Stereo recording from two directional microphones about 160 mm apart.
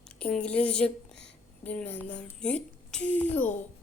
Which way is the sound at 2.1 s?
5° left (ahead or behind).